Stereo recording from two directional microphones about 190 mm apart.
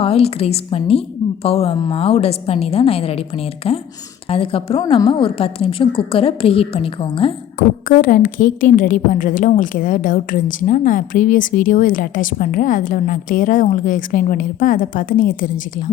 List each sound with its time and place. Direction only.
0.0 s a woman's voice: 30° left (ahead or behind)
7.9 s a woman's voice: 45° left (ahead or behind)